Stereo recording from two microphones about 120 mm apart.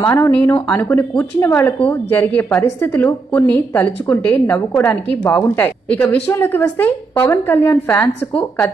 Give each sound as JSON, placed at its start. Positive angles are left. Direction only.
{"t": 0.0, "sound": "a woman's voice", "side_deg": 25}